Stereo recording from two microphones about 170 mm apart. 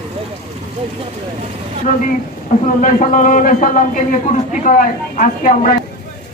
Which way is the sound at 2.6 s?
50° left (ahead or behind).